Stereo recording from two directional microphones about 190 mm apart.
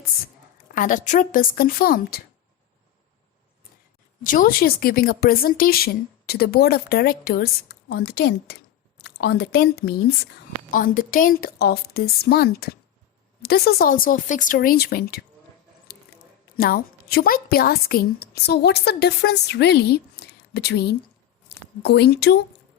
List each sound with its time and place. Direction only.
0.7 s a woman's voice: 45° left (ahead or behind)
4.2 s a woman's voice: 45° left (ahead or behind); by 10.2 s 60° left (ahead or behind)
10.7 s a woman's voice: 45° left (ahead or behind)
15.9 s squish: 55° left (ahead or behind)
16.6 s a woman's voice: 50° left (ahead or behind)